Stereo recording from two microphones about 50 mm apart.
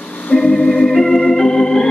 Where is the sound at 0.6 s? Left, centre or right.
Left.